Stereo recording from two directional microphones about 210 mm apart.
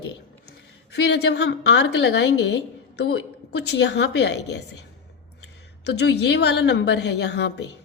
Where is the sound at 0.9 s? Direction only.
55° left (ahead or behind).